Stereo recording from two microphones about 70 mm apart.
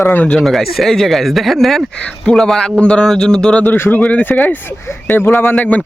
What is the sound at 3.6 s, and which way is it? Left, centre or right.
A man's voice, left.